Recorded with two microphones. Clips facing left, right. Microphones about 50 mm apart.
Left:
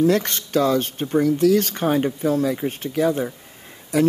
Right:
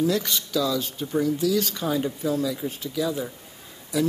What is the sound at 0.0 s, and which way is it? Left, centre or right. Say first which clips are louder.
Speech: left 5 dB; left.